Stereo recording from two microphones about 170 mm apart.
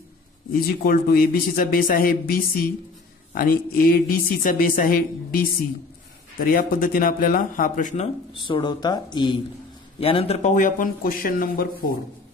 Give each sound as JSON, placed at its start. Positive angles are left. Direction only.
{"t": 0.5, "sound": "speech", "side_deg": 60}
{"t": 8.4, "sound": "speech", "side_deg": 30}